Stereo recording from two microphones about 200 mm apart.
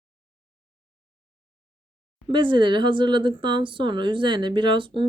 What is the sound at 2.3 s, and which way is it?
A woman's voice, 25° right (ahead or behind).